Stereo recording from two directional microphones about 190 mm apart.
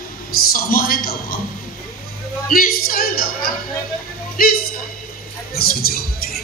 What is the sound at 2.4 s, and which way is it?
Speech, 50° left (ahead or behind).